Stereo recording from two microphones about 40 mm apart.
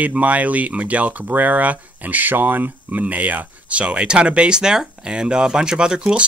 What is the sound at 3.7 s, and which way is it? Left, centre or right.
Speech, right.